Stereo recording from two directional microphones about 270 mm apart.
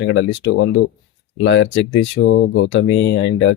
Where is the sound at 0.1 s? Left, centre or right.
Left.